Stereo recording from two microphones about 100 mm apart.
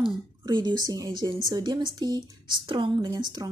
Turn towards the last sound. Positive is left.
turn(degrees=-40)  # may be behind; listen again after turning